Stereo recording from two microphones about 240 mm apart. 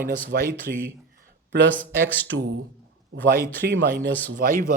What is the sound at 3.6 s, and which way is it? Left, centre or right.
A man's voice, right.